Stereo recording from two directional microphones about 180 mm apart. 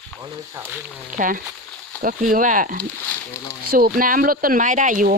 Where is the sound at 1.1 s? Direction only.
50° right (ahead or behind).